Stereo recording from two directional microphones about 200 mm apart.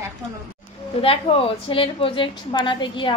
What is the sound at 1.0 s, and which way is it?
A woman's voice, 30° left (ahead or behind).